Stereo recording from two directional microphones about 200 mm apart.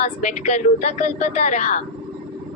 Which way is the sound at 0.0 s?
35° left (ahead or behind).